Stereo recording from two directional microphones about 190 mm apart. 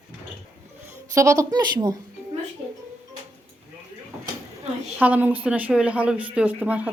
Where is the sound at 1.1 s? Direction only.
15° right (ahead or behind).